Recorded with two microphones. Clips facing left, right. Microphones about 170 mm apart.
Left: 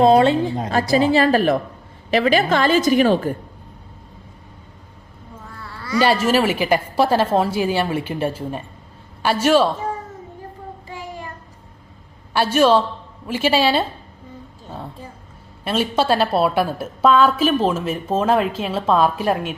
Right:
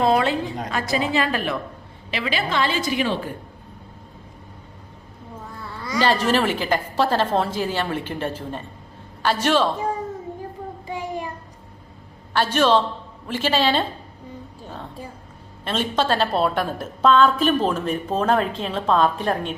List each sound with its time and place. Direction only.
0.0 s a woman's voice: 25° left (ahead or behind); by 3.3 s 45° left (ahead or behind)
6.0 s a woman's voice: 10° left (ahead or behind)
10.8 s child singing: 20° right (ahead or behind)
12.3 s a woman's voice: 10° left (ahead or behind)
15.6 s a woman's voice: 10° left (ahead or behind)